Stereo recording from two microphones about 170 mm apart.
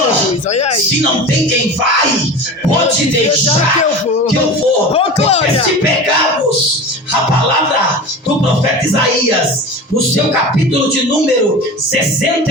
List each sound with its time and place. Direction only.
0.5 s speech: 40° left (ahead or behind)
4.9 s speech: 35° left (ahead or behind)